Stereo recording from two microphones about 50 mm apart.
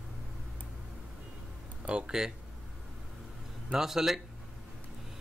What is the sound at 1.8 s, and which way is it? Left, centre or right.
Speech, centre.